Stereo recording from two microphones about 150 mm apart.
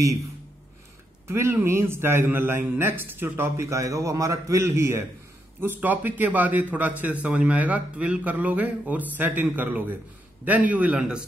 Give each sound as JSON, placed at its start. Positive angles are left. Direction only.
{"t": 1.2, "sound": "a man's voice", "side_deg": -15}